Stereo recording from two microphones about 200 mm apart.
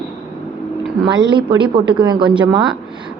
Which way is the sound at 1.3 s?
25° right (ahead or behind).